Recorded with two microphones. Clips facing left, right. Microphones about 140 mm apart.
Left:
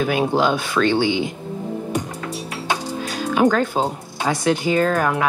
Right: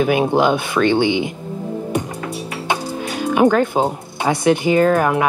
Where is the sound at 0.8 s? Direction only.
55° right (ahead or behind).